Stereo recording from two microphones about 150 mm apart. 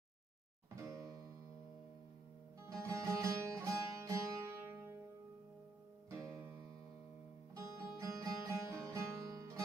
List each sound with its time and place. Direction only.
0.9 s music: 25° right (ahead or behind)
2.6 s music: 20° right (ahead or behind)
7.5 s music: 20° right (ahead or behind)